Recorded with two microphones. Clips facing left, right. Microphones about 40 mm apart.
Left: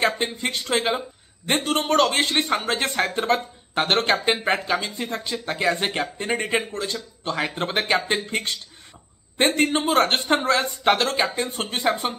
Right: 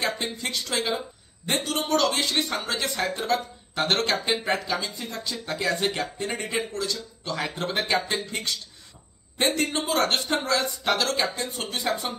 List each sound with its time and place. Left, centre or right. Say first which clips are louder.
0.0 s a man's voice: left 5 dB; left